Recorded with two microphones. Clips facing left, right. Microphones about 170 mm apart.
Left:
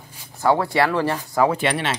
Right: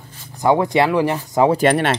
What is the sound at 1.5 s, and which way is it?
Speech, 45° right (ahead or behind).